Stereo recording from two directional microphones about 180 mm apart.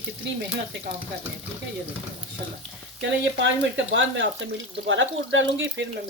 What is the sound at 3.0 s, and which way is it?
Speech, 80° right.